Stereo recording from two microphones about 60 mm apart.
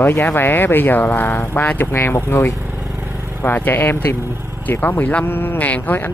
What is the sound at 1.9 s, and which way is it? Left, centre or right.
Speech, left.